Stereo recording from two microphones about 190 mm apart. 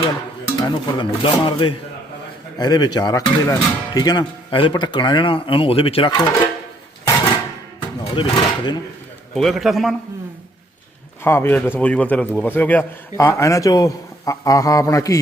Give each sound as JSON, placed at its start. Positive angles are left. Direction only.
{"t": 0.5, "sound": "speech", "side_deg": 25}
{"t": 7.8, "sound": "speech", "side_deg": 25}
{"t": 9.3, "sound": "a man's voice", "side_deg": 0}
{"t": 11.2, "sound": "a man's voice", "side_deg": 10}